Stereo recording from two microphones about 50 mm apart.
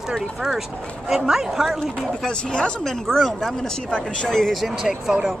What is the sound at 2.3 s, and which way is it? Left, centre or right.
Speech, centre.